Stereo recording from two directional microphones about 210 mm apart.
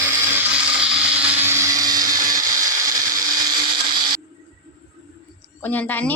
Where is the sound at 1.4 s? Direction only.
15° right (ahead or behind).